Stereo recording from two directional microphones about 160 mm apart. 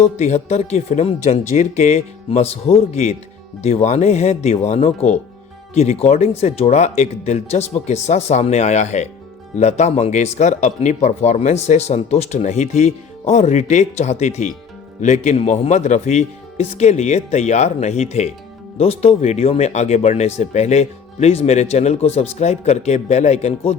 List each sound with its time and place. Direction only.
0.0 s speech: 45° left (ahead or behind)